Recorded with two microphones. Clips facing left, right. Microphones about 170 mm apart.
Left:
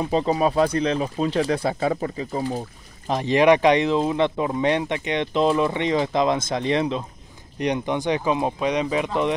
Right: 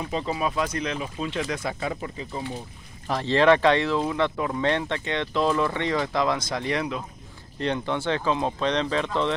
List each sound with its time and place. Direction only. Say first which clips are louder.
0.0 s speech: left 7 dB; 35° left (ahead or behind)
3.1 s speech: left 2 dB; 15° left (ahead or behind)